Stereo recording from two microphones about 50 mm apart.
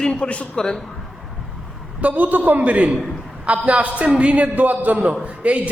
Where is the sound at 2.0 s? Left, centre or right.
Right.